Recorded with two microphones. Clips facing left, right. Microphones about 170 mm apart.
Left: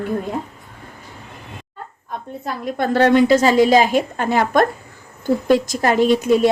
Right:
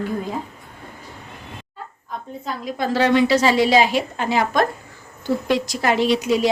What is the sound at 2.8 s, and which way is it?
Speech, 60° left (ahead or behind).